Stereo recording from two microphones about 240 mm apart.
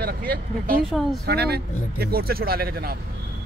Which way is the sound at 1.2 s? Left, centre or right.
Right.